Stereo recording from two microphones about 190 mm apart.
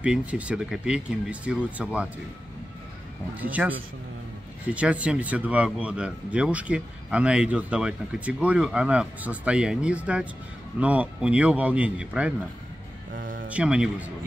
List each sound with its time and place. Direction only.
0.0 s speech: 5° right (ahead or behind)
3.6 s speech: 5° right (ahead or behind)
4.7 s speech: 5° right (ahead or behind)
13.1 s music: 45° right (ahead or behind)
13.5 s speech: 5° right (ahead or behind)